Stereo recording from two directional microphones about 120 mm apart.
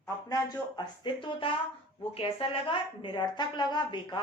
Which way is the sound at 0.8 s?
40° left (ahead or behind).